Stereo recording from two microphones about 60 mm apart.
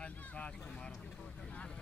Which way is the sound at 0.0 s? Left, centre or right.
Centre.